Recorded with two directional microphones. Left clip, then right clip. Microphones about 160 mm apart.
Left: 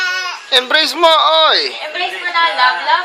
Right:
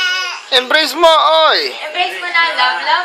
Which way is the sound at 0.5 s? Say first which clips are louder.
Even; 5° right (ahead or behind).